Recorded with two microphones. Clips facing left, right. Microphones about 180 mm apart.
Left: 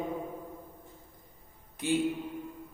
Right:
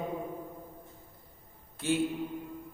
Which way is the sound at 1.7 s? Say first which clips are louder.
Left 1 dB; 15° left (ahead or behind).